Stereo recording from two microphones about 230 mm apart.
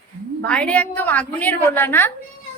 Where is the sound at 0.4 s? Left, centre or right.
Centre.